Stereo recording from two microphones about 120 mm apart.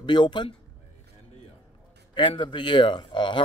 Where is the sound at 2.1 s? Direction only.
45° left (ahead or behind).